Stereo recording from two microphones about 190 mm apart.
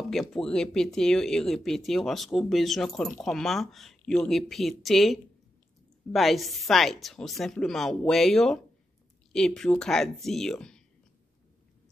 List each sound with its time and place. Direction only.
0.1 s speech: centre (ahead or behind)